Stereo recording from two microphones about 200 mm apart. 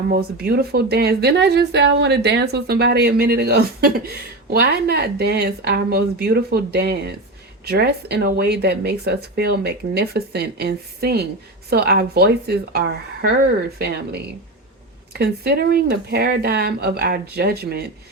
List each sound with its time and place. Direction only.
0.1 s a woman's voice: 50° right (ahead or behind)